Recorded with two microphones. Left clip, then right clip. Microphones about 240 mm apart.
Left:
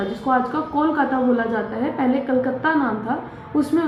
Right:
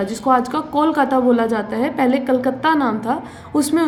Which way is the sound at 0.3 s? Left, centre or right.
Right.